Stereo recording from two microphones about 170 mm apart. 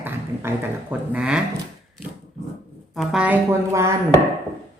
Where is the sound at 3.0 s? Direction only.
5° right (ahead or behind).